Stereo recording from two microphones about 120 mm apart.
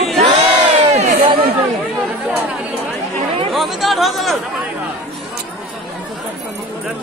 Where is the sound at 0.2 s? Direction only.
65° right (ahead or behind).